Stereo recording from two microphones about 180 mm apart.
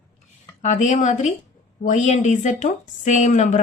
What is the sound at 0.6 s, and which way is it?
Speech, 40° left (ahead or behind).